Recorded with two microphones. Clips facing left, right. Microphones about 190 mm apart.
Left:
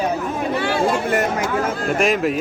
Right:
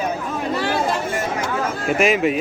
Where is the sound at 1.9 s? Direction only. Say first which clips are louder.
Right 2 dB; centre (ahead or behind).